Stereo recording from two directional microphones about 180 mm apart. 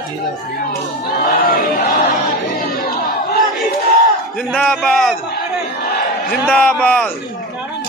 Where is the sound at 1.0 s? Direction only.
55° left (ahead or behind).